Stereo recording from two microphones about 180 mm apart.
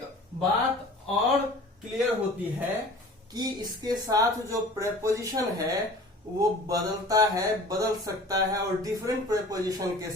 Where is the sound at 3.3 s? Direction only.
20° right (ahead or behind).